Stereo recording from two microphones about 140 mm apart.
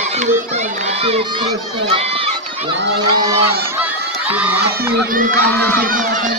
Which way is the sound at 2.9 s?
30° right (ahead or behind).